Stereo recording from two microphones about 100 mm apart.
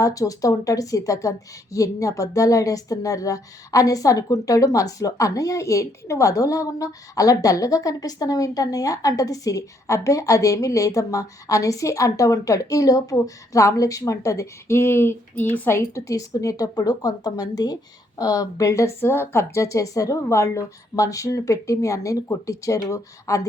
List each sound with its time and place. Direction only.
0.0 s a woman's voice: 35° left (ahead or behind)